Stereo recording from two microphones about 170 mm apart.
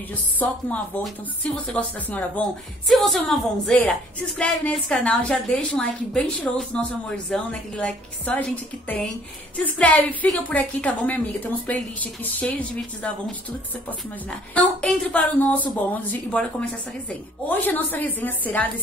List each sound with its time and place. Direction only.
0.1 s a woman's voice: 10° left (ahead or behind)